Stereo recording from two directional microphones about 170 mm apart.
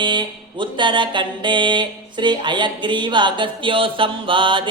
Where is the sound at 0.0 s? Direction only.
25° right (ahead or behind).